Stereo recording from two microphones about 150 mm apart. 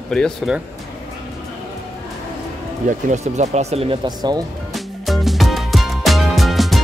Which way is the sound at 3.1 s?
50° right (ahead or behind).